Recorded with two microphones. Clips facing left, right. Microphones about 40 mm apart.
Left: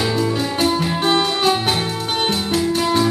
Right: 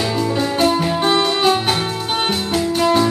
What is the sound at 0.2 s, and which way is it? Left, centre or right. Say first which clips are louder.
Music: right 2 dB; centre.